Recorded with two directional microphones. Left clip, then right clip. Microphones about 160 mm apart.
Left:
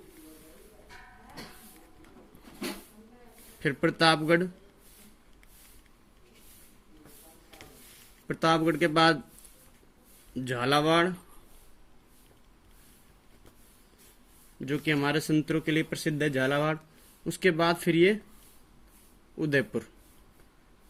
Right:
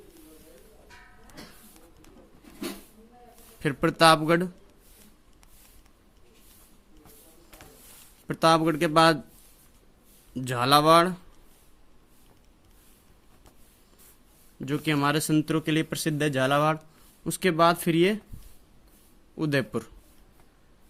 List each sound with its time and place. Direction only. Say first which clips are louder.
3.6 s speech: right 4 dB; 45° right (ahead or behind)
8.3 s speech: right 4 dB; 40° right (ahead or behind)
10.3 s speech: right 5 dB; 45° right (ahead or behind)
14.6 s speech: right 2 dB; 45° right (ahead or behind)
19.4 s speech: even; 45° right (ahead or behind)